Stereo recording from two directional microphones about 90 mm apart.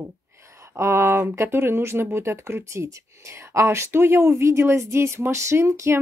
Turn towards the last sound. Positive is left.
turn(degrees=-30)  # may be behind; listen again after turning